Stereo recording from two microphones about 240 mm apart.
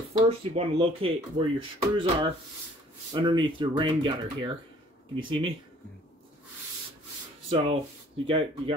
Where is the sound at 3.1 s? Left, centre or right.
Centre.